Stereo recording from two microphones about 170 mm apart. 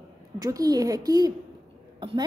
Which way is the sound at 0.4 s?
20° right (ahead or behind).